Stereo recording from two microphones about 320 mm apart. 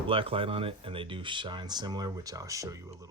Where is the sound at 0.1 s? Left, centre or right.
Centre.